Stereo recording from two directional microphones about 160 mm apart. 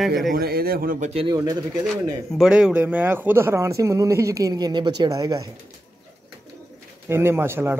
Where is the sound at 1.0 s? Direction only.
40° right (ahead or behind).